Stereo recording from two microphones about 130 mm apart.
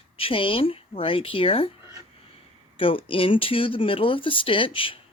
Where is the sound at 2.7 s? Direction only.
45° left (ahead or behind).